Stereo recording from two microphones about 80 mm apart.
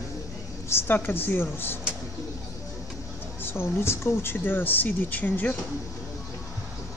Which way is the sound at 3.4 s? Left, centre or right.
Left.